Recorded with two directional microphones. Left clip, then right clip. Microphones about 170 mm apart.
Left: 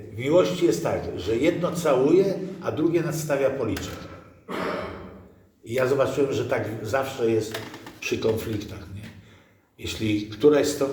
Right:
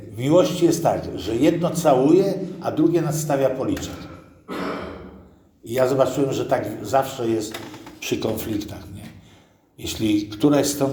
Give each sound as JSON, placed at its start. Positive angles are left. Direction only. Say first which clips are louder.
{"t": 0.2, "sound": "a man's voice", "louder": "right 3 dB", "side_deg": -45}
{"t": 5.6, "sound": "a man's voice", "louder": "right 3 dB", "side_deg": -45}
{"t": 9.8, "sound": "a man's voice", "louder": "right 5 dB", "side_deg": -45}